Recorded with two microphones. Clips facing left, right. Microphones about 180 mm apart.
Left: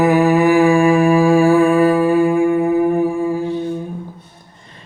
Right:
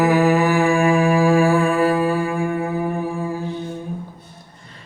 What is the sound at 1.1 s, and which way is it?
Humming, 15° left (ahead or behind).